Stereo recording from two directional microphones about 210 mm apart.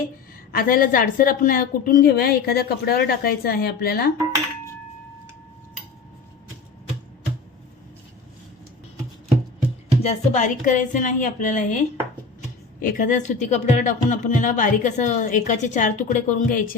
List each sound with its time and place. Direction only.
0.5 s a woman's voice: 45° left (ahead or behind)
10.0 s speech: 35° left (ahead or behind)
12.8 s speech: 40° left (ahead or behind)